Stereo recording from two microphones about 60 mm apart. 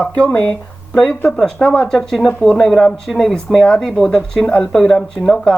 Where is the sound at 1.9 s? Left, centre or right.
Centre.